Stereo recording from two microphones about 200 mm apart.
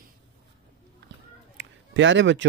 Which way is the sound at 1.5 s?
70° right (ahead or behind).